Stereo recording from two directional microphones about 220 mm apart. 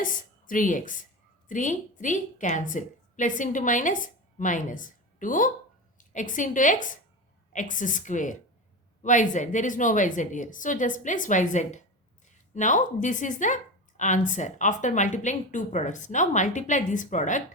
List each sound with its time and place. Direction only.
0.0 s a woman's voice: 35° left (ahead or behind)